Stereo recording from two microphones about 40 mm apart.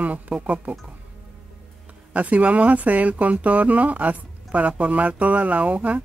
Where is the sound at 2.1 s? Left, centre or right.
Right.